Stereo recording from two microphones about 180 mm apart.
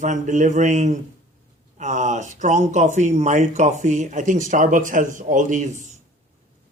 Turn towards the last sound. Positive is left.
turn(degrees=-40)  # may be behind; listen again after turning